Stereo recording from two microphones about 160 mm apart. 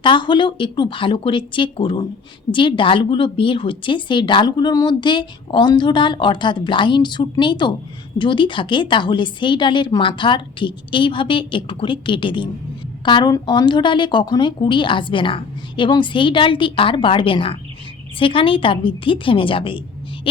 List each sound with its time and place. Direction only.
0.0 s a woman's voice: 30° left (ahead or behind)